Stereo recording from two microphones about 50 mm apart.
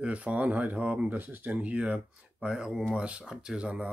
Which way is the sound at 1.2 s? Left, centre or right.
Right.